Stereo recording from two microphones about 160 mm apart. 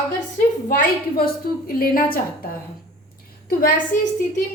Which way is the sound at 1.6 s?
65° left (ahead or behind).